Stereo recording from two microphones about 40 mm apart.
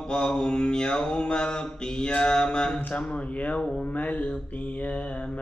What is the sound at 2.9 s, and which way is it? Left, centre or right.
Speech, left.